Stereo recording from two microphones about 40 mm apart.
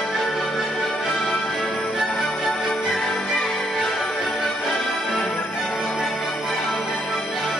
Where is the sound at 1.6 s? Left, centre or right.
Left.